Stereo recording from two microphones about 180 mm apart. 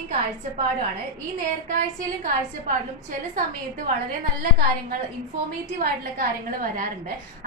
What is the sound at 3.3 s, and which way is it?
Speech, 50° right (ahead or behind).